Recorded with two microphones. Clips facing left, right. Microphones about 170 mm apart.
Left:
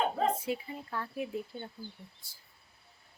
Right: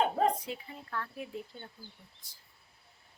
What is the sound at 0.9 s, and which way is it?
Speech, 15° left (ahead or behind).